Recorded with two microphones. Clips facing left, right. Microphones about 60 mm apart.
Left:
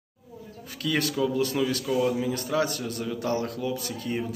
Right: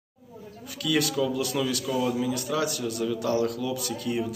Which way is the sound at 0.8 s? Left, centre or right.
Left.